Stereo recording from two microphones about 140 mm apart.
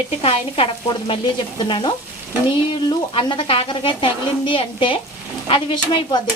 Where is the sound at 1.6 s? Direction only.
35° left (ahead or behind).